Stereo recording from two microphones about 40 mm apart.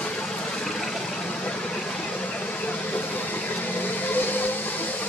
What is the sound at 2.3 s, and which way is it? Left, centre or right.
Vehicle, left.